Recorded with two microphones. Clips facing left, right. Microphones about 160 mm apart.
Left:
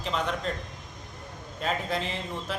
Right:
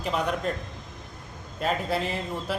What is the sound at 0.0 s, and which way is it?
Speech, 10° right (ahead or behind).